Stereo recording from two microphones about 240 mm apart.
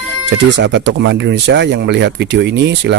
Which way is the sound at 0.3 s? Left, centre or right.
Right.